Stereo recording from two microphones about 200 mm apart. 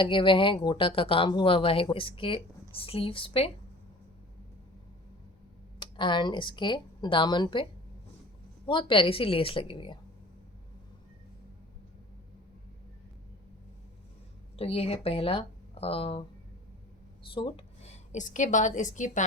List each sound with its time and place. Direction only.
0.0 s speech: 25° left (ahead or behind)
5.8 s speech: 25° left (ahead or behind)
14.5 s speech: 30° left (ahead or behind)
17.3 s a woman's voice: 25° left (ahead or behind)